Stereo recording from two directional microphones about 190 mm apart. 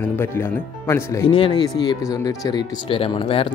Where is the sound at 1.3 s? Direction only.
25° left (ahead or behind).